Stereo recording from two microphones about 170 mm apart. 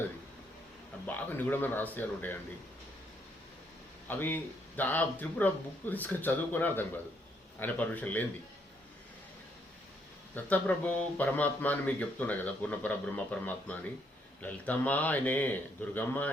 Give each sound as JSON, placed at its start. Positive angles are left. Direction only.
{"t": 1.0, "sound": "speech", "side_deg": 10}
{"t": 4.1, "sound": "speech", "side_deg": 10}
{"t": 10.3, "sound": "speech", "side_deg": 10}